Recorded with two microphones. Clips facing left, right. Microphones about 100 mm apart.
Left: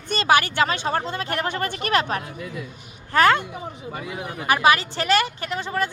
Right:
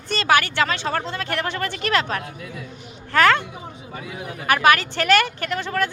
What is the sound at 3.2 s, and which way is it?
Speech, 15° left (ahead or behind).